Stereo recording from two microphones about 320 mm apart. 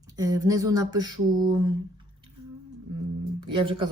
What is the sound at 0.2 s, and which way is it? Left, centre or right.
Speech, centre.